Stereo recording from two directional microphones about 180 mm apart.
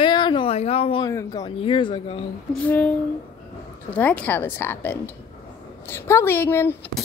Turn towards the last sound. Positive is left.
turn(degrees=15)  # may be behind; listen again after turning